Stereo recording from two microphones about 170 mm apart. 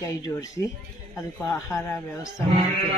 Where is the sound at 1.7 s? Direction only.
15° left (ahead or behind).